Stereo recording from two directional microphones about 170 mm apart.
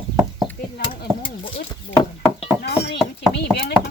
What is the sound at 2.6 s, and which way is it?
Speech, 75° left (ahead or behind).